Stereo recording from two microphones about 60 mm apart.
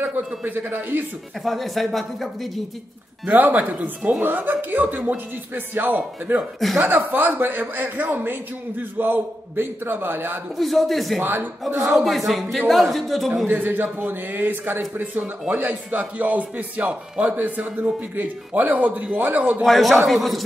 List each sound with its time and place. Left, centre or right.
0.0 s a man's voice: right
1.4 s speech: centre
3.3 s a man's voice: right
10.6 s speech: centre
11.1 s a man's voice: right
12.3 s speech: centre
13.5 s a man's voice: right
19.6 s speech: centre